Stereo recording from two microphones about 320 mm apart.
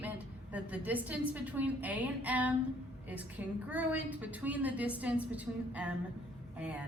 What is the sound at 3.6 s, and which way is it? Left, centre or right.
A woman's voice, centre.